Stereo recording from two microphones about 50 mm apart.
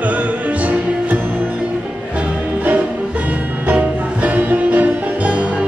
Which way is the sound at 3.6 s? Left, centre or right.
Right.